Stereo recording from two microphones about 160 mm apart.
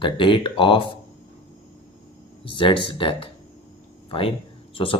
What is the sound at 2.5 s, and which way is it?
Speech, 30° left (ahead or behind).